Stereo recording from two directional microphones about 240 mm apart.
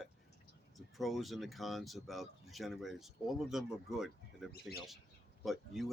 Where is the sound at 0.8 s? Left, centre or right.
Centre.